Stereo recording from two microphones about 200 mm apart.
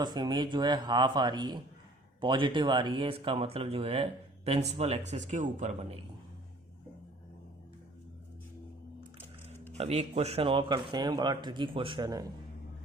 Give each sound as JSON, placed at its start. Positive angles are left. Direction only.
{"t": 0.0, "sound": "speech", "side_deg": -20}
{"t": 9.7, "sound": "speech", "side_deg": -30}